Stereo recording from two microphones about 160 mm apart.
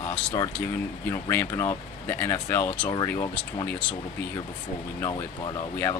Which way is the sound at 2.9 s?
25° left (ahead or behind).